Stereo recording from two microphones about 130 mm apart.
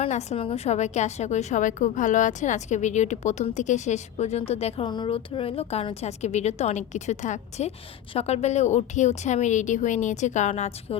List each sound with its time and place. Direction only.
0.0 s a woman's voice: 60° left (ahead or behind)
0.3 s a woman's voice: 50° left (ahead or behind)
4.9 s a woman's voice: 40° left (ahead or behind); by 7.7 s 65° left (ahead or behind)
8.1 s a woman's voice: 50° left (ahead or behind)